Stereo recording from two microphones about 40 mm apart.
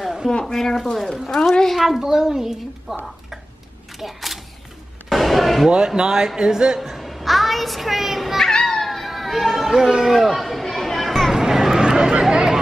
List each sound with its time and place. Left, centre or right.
0.0 s a sound: centre
0.5 s speech: centre
1.8 s a woman's voice: centre
4.0 s speech: centre
5.1 s a sound: centre
5.7 s a man's voice: right
6.8 s a child's voice: centre
8.4 s music: centre
9.0 s chatter: centre
11.3 s vehicle: centre